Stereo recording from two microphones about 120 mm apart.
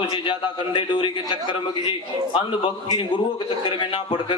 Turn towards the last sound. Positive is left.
turn(degrees=45)  # may be behind; listen again after turning